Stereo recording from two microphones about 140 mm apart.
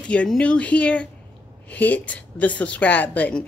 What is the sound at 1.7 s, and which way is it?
A woman's voice, 10° left (ahead or behind).